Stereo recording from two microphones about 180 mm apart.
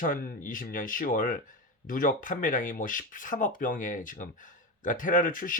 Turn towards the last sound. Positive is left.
turn(degrees=50)  # may be behind; listen again after turning